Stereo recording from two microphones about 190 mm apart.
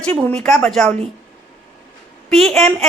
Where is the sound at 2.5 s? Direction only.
Centre (ahead or behind).